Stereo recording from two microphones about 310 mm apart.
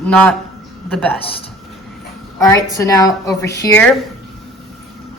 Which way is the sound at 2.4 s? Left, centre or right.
Centre.